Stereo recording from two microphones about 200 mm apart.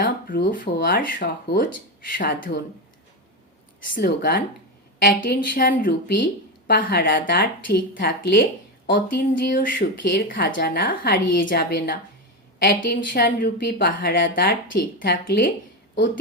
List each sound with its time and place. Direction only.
0.0 s a woman's voice: 55° left (ahead or behind)
3.9 s a woman's voice: 50° left (ahead or behind)
12.6 s a woman's voice: 60° left (ahead or behind)
14.2 s a woman's voice: 60° left (ahead or behind)